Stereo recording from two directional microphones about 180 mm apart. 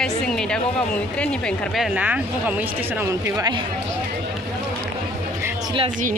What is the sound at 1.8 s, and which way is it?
Speech, 5° right (ahead or behind).